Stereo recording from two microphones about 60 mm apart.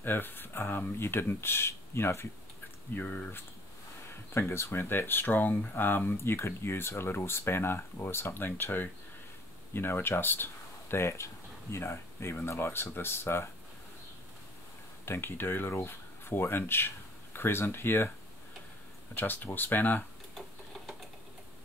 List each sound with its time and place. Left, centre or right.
0.0 s speech: left
2.9 s speech: left
4.3 s speech: left
15.0 s speech: left
19.1 s speech: left